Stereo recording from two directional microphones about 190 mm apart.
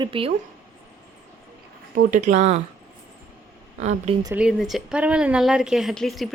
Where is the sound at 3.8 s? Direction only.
40° right (ahead or behind).